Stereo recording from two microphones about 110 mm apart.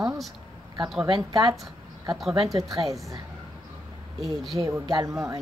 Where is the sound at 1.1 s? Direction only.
45° right (ahead or behind).